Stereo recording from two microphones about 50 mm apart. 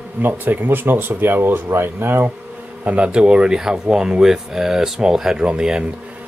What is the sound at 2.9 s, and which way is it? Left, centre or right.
Speech, right.